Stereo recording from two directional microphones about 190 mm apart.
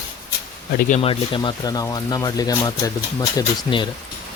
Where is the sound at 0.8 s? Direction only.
35° left (ahead or behind).